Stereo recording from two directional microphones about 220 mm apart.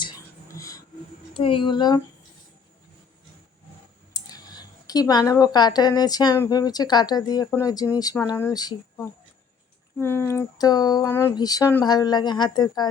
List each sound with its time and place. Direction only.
0.0 s whispering: 15° left (ahead or behind)
1.3 s speech: 25° left (ahead or behind)
4.1 s speech: 15° left (ahead or behind)
10.0 s speech: 10° left (ahead or behind)